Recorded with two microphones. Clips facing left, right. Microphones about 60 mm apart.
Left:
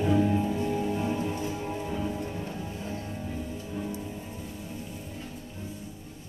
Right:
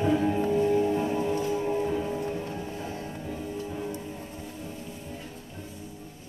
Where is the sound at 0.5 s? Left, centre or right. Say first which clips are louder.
Right 5 dB; centre.